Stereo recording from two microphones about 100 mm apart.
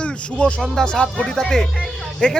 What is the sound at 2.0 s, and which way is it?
Music, 5° left (ahead or behind).